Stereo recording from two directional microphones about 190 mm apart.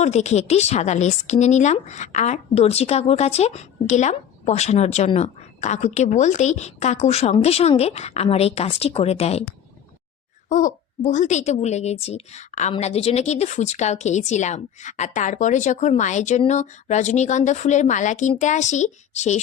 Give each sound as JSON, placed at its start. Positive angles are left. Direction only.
{"t": 0.0, "sound": "speech", "side_deg": 35}
{"t": 10.5, "sound": "speech", "side_deg": 40}